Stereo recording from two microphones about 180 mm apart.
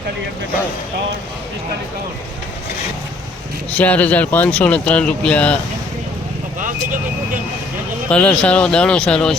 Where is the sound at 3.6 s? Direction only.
10° left (ahead or behind).